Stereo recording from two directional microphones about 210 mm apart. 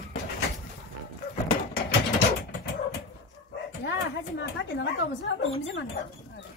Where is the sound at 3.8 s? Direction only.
55° left (ahead or behind).